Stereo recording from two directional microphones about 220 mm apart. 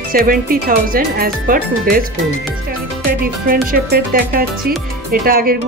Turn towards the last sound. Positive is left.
turn(degrees=-40)  # may be behind; listen again after turning